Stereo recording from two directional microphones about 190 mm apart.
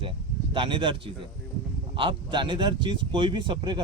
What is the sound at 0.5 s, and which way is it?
Speech, 25° right (ahead or behind).